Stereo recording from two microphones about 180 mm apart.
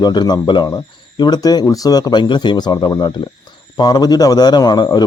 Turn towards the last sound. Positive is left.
turn(degrees=25)  # may be behind; listen again after turning